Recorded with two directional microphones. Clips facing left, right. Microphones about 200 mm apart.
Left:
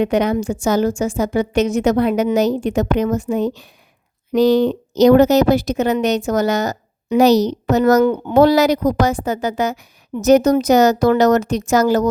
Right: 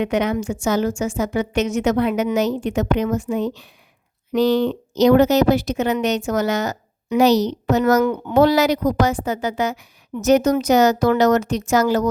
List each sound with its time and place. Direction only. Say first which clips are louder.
0.0 s speech: left 3 dB; 35° left (ahead or behind)